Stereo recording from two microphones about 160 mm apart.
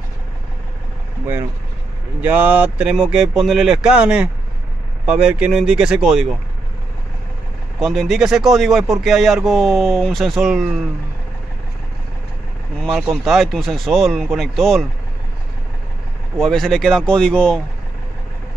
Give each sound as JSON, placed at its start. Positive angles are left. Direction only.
{"t": 1.2, "sound": "speech", "side_deg": -15}
{"t": 7.8, "sound": "speech", "side_deg": 0}
{"t": 13.1, "sound": "speech", "side_deg": 0}
{"t": 16.3, "sound": "speech", "side_deg": 5}